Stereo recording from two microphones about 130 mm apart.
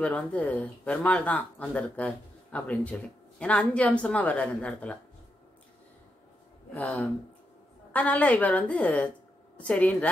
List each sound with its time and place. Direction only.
0.0 s speech: 10° left (ahead or behind)
6.7 s speech: 10° left (ahead or behind)